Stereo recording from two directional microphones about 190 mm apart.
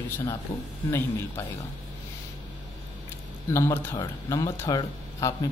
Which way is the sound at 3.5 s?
15° left (ahead or behind).